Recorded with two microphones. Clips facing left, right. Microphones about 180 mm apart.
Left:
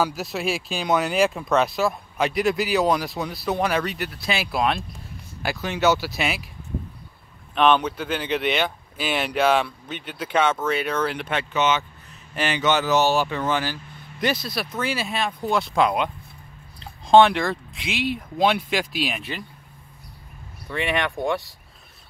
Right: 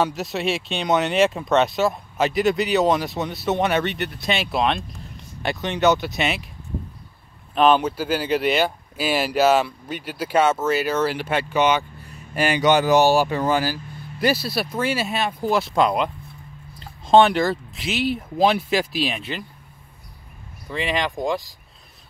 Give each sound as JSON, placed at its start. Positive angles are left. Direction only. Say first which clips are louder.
{"t": 0.0, "sound": "speech", "louder": "right 2 dB", "side_deg": 0}
{"t": 7.5, "sound": "speech", "louder": "right 2 dB", "side_deg": -5}
{"t": 14.4, "sound": "speech", "louder": "right 4 dB", "side_deg": -30}
{"t": 14.9, "sound": "speech", "louder": "right 3 dB", "side_deg": -5}
{"t": 17.1, "sound": "speech", "louder": "even", "side_deg": 0}
{"t": 20.7, "sound": "speech", "louder": "even", "side_deg": -5}